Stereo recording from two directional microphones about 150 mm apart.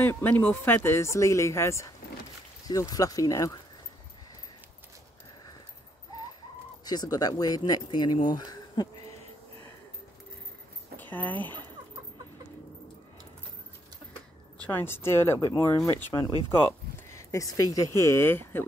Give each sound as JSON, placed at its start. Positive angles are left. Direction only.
{"t": 0.0, "sound": "speech", "side_deg": 15}
{"t": 6.8, "sound": "speech", "side_deg": 25}
{"t": 11.0, "sound": "a sound", "side_deg": 10}
{"t": 14.6, "sound": "speech", "side_deg": 15}
{"t": 16.9, "sound": "a sound", "side_deg": 20}
{"t": 17.9, "sound": "speech", "side_deg": 20}